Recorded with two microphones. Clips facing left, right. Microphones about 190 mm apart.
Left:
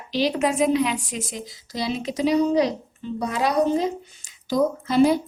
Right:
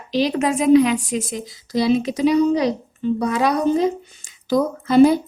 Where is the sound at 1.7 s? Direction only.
55° right (ahead or behind).